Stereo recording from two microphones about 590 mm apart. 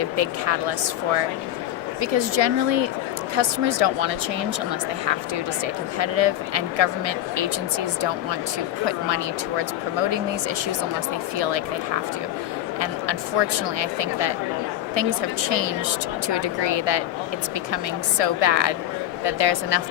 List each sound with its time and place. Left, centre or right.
0.0 s speech: right
2.0 s speech: right
6.0 s speech: right
8.8 s speech: right
11.3 s speech: right
12.8 s speech: right
18.2 s speech: right